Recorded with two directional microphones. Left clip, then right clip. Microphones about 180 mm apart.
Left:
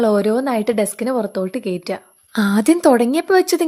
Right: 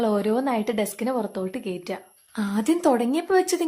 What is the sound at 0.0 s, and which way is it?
Speech, 25° left (ahead or behind).